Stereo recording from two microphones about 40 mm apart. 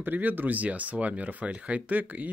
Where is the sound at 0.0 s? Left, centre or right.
Right.